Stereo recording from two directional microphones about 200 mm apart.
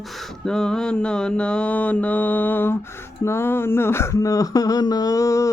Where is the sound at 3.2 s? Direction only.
10° left (ahead or behind).